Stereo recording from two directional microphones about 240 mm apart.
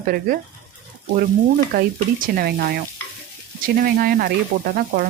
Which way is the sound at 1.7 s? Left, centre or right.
Right.